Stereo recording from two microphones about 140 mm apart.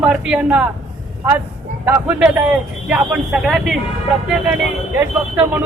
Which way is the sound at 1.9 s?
10° right (ahead or behind).